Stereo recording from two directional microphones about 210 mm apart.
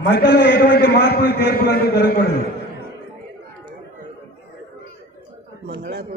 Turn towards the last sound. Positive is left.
turn(degrees=-50)  # may be behind; listen again after turning